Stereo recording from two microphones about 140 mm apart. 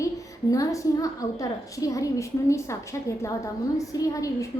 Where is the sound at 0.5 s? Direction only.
25° left (ahead or behind).